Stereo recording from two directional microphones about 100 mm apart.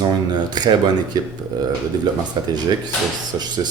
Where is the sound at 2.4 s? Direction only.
50° right (ahead or behind).